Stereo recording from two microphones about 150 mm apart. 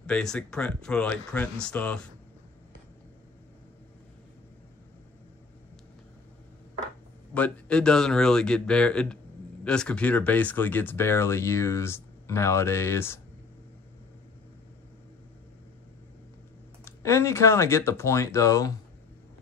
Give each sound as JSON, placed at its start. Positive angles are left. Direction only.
{"t": 0.0, "sound": "speech", "side_deg": 5}
{"t": 7.3, "sound": "speech", "side_deg": 10}
{"t": 16.8, "sound": "speech", "side_deg": 20}